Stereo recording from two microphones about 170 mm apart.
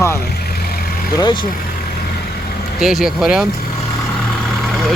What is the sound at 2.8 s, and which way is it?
Speech, 5° right (ahead or behind).